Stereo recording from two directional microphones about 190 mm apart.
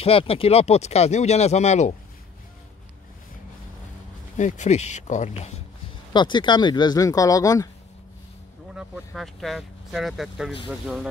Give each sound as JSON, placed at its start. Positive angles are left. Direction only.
{"t": 0.0, "sound": "speech", "side_deg": 30}
{"t": 4.4, "sound": "speech", "side_deg": 40}
{"t": 6.1, "sound": "speech", "side_deg": 25}
{"t": 8.7, "sound": "speech", "side_deg": 0}